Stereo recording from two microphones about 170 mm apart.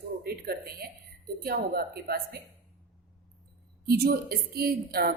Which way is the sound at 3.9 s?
65° right (ahead or behind).